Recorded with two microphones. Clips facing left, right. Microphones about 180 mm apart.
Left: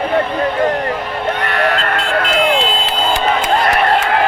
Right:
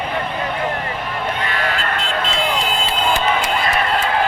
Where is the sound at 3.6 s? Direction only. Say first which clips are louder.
Left 5 dB; 70° left (ahead or behind).